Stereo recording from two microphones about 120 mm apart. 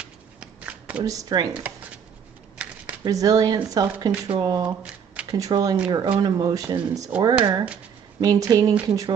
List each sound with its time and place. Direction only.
0.0 s shuffling cards: 10° right (ahead or behind)
1.0 s speech: 30° right (ahead or behind)
2.6 s a sound: 10° right (ahead or behind)
3.0 s speech: 30° right (ahead or behind)